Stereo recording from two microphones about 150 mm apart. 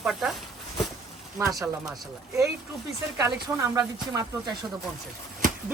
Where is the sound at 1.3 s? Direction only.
20° right (ahead or behind).